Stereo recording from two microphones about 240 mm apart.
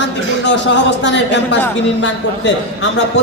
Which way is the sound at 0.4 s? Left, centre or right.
Left.